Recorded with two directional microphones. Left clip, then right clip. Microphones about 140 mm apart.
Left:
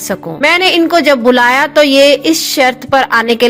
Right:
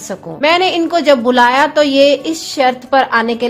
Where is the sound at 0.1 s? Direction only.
25° left (ahead or behind).